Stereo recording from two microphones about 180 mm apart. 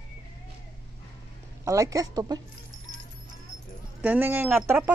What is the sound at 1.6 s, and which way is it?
Speech, 15° right (ahead or behind).